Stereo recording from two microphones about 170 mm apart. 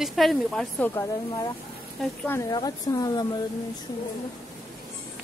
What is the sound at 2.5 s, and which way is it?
Speech, 25° left (ahead or behind).